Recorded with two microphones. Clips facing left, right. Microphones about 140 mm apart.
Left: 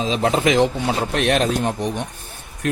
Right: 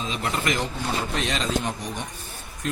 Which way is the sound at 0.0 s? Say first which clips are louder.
Left 9 dB; 90° left.